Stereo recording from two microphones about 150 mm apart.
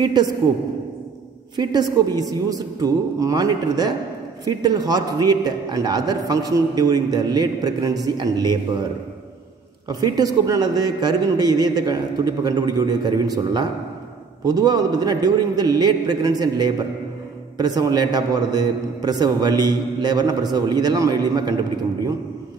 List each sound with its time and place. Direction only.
0.0 s a man's voice: 30° right (ahead or behind)
1.6 s a man's voice: 25° right (ahead or behind)
9.8 s a man's voice: 25° right (ahead or behind)